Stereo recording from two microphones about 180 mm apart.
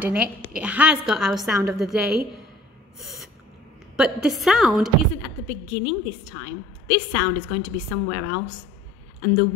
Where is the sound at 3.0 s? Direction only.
Centre (ahead or behind).